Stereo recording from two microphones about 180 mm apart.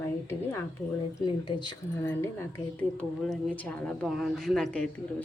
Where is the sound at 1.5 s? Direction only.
25° left (ahead or behind).